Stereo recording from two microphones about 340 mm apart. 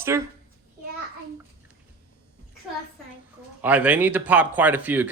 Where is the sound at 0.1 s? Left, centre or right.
Centre.